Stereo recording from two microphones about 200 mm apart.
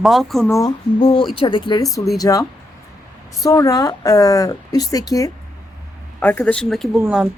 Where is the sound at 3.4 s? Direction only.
15° left (ahead or behind).